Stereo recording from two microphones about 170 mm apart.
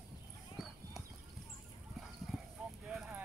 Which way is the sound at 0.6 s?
Centre (ahead or behind).